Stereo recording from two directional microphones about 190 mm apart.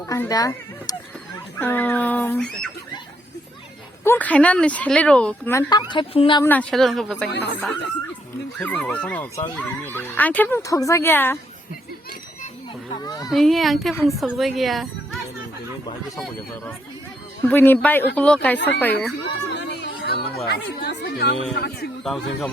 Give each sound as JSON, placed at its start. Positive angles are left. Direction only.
{"t": 0.1, "sound": "speech", "side_deg": 20}
{"t": 4.0, "sound": "a woman's voice", "side_deg": 10}
{"t": 6.4, "sound": "speech", "side_deg": 10}
{"t": 7.3, "sound": "a man's voice", "side_deg": 65}
{"t": 8.5, "sound": "speech", "side_deg": 5}
{"t": 13.1, "sound": "speech", "side_deg": 20}
{"t": 13.3, "sound": "speech", "side_deg": 0}
{"t": 16.1, "sound": "speech", "side_deg": 0}
{"t": 19.3, "sound": "music", "side_deg": 65}
{"t": 21.5, "sound": "a man's voice", "side_deg": 60}
{"t": 22.0, "sound": "speech", "side_deg": 0}